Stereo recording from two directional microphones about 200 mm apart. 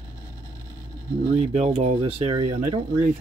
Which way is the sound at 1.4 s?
30° right (ahead or behind).